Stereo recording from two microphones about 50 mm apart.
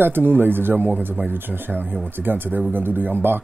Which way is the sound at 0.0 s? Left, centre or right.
Right.